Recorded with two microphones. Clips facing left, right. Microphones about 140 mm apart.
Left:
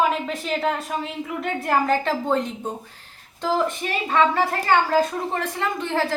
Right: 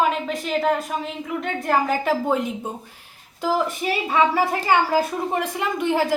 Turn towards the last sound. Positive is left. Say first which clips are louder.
# right 3 dB
turn(degrees=-15)  # may be behind; listen again after turning